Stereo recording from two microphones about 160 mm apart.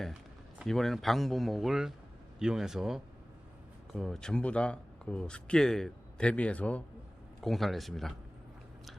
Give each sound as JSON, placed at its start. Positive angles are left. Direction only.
{"t": 0.6, "sound": "a man's voice", "side_deg": 0}